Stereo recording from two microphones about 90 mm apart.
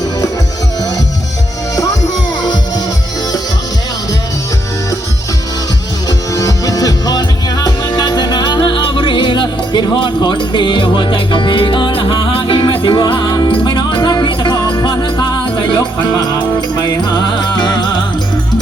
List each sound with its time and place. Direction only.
1.7 s music: 35° left (ahead or behind)
6.1 s music: 40° left (ahead or behind); by 14.5 s 60° left (ahead or behind)
14.5 s jingle bell: 40° left (ahead or behind)
14.8 s music: 55° left (ahead or behind)